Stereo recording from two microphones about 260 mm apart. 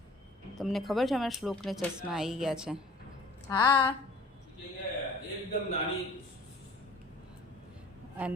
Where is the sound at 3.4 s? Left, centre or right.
Centre.